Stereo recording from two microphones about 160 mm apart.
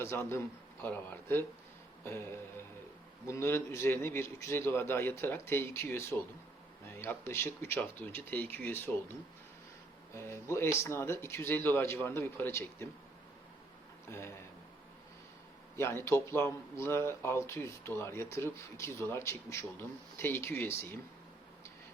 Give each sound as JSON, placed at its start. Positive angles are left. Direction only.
{"t": 0.0, "sound": "speech", "side_deg": 15}
{"t": 3.2, "sound": "speech", "side_deg": 15}
{"t": 10.2, "sound": "speech", "side_deg": 15}
{"t": 14.1, "sound": "speech", "side_deg": 15}
{"t": 15.7, "sound": "speech", "side_deg": 15}